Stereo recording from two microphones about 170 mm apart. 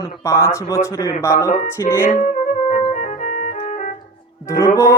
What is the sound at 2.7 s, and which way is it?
Organ, 45° left (ahead or behind).